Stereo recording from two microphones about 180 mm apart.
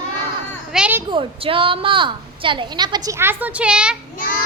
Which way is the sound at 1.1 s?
30° right (ahead or behind).